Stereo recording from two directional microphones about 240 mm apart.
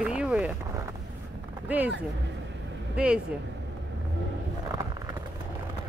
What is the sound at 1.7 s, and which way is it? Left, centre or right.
Speech, centre.